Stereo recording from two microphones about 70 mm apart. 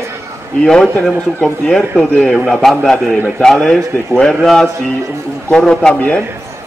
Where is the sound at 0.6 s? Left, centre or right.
Centre.